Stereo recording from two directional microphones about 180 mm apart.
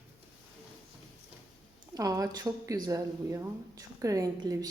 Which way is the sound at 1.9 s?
20° right (ahead or behind).